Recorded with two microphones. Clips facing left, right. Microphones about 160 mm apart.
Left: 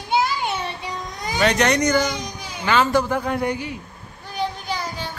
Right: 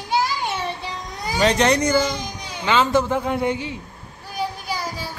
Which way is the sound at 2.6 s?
20° right (ahead or behind).